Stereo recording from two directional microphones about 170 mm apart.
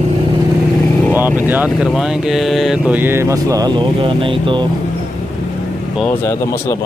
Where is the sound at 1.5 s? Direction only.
10° right (ahead or behind); by 4.6 s 30° right (ahead or behind).